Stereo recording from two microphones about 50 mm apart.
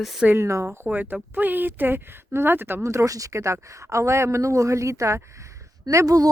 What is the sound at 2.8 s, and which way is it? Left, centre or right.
Speech, right.